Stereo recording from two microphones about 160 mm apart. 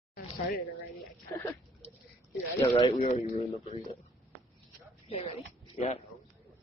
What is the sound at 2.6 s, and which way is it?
Speech, 30° left (ahead or behind).